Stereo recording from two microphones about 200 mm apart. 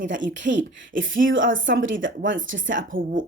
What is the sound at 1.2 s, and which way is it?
Speech, 70° right (ahead or behind).